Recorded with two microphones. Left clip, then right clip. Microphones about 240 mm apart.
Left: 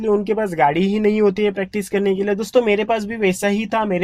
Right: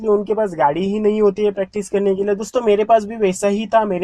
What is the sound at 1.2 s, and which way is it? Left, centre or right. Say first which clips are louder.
Speech: right 1 dB; left.